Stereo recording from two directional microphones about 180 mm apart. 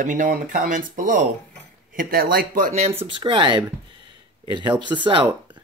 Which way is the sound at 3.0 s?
25° right (ahead or behind).